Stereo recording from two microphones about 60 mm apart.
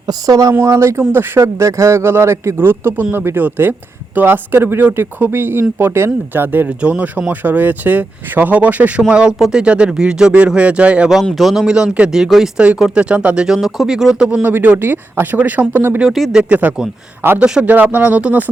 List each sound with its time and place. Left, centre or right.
0.1 s speech: right
0.6 s speech: right
2.6 s speech: right
6.8 s speech: right
9.0 s speech: centre
11.3 s speech: centre
12.9 s speech: centre
14.4 s speech: right
16.0 s speech: centre
16.4 s speech: right
17.4 s speech: centre
17.7 s speech: right